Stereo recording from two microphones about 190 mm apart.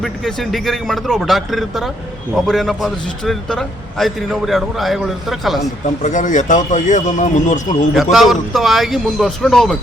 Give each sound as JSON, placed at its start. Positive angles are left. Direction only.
{"t": 0.0, "sound": "a man's voice", "side_deg": 0}
{"t": 6.0, "sound": "speech", "side_deg": 40}
{"t": 8.1, "sound": "a man's voice", "side_deg": 0}